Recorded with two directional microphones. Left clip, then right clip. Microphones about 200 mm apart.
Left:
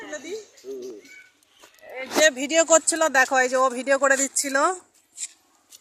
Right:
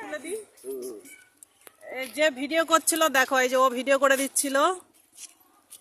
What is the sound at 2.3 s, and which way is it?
Speech, 35° left (ahead or behind).